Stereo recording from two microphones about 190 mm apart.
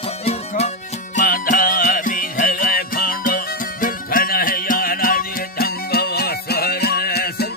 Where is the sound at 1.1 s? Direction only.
45° left (ahead or behind).